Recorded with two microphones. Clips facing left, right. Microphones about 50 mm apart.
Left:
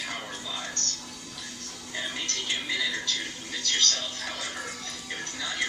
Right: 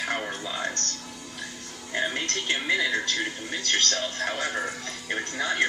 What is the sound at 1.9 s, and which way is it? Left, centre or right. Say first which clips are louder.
Speech: right 6 dB; right.